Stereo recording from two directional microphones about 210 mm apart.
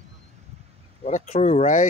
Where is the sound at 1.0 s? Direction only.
30° left (ahead or behind).